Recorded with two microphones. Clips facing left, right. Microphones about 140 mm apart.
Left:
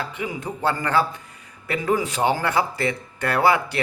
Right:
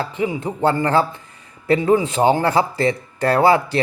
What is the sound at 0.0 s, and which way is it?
Speech, 30° right (ahead or behind).